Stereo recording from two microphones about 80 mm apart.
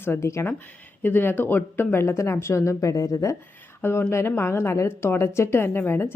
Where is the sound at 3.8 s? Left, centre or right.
Left.